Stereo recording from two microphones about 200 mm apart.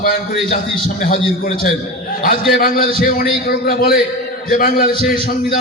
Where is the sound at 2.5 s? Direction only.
45° left (ahead or behind).